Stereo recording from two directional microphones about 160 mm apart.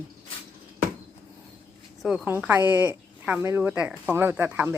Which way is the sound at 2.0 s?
5° right (ahead or behind).